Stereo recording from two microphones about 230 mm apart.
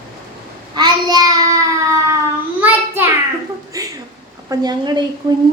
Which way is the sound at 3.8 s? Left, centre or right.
Centre.